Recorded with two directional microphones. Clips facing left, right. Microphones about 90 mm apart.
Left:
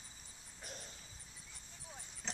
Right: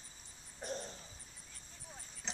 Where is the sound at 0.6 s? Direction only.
35° right (ahead or behind).